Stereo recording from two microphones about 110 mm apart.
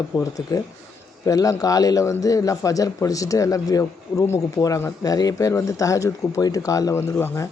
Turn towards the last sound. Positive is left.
turn(degrees=20)  # may be behind; listen again after turning